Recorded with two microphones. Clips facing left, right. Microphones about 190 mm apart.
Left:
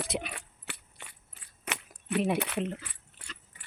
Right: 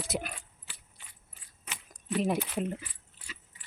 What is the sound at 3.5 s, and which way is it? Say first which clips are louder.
Dog: left 3 dB; 55° left (ahead or behind).